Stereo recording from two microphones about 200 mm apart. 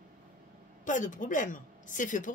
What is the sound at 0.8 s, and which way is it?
Speech, 40° left (ahead or behind).